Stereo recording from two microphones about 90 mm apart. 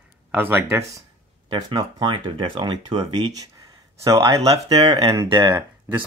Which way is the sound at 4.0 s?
40° right (ahead or behind).